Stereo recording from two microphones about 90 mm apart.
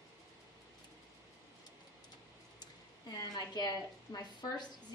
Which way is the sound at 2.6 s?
50° left (ahead or behind).